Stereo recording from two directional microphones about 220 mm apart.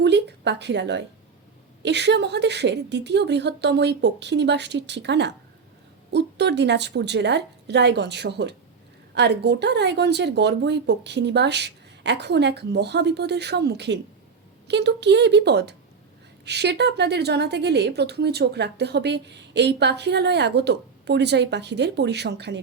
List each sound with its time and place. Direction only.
0.0 s a woman's voice: 50° right (ahead or behind)